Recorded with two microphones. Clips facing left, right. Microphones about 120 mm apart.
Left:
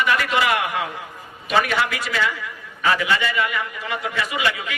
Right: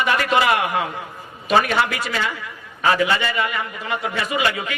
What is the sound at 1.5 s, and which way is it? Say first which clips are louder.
A man's voice: right 2 dB; 35° right (ahead or behind).